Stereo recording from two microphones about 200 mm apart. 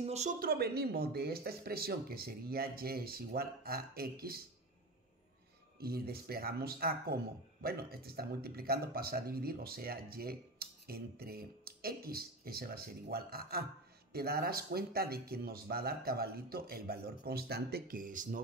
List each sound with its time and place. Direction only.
0.0 s speech: 35° right (ahead or behind); by 4.4 s 50° right (ahead or behind)
5.8 s speech: 50° right (ahead or behind)